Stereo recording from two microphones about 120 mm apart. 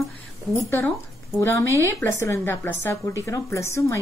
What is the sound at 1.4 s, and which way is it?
Speech, 20° left (ahead or behind).